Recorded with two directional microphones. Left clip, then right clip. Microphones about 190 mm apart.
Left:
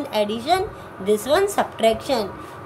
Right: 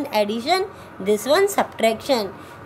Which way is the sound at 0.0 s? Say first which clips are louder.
Right 1 dB; 35° right (ahead or behind).